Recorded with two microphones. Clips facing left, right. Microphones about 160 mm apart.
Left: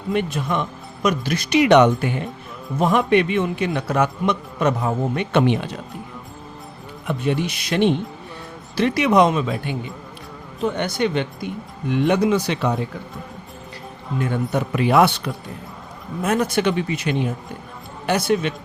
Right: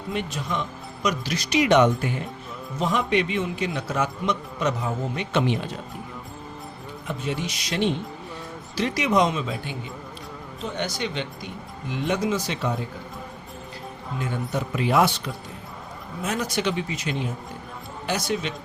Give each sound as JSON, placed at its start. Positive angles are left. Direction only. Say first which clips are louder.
{"t": 0.1, "sound": "a man's voice", "louder": "left 7 dB", "side_deg": 55}
{"t": 2.7, "sound": "a man's voice", "louder": "left 6 dB", "side_deg": 55}
{"t": 7.1, "sound": "a man's voice", "louder": "left 7 dB", "side_deg": 60}
{"t": 10.6, "sound": "a man's voice", "louder": "left 8 dB", "side_deg": 60}
{"t": 14.5, "sound": "a man's voice", "louder": "left 4 dB", "side_deg": 65}
{"t": 16.2, "sound": "a man's voice", "louder": "left 6 dB", "side_deg": 55}